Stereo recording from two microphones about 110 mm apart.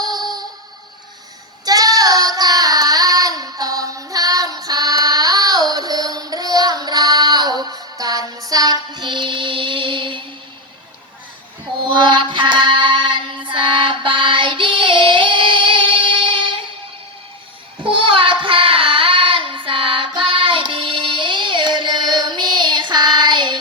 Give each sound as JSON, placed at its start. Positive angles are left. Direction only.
{"t": 0.0, "sound": "music", "side_deg": -40}
{"t": 1.6, "sound": "child singing", "side_deg": -35}
{"t": 11.9, "sound": "female singing", "side_deg": -45}
{"t": 17.8, "sound": "child singing", "side_deg": -50}